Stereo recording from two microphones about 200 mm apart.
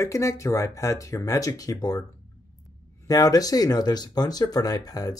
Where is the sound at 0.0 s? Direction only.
15° left (ahead or behind).